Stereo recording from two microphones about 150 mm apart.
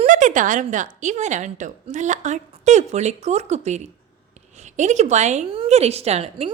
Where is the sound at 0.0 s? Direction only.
55° right (ahead or behind).